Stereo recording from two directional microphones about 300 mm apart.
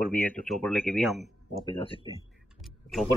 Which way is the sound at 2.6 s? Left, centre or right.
Centre.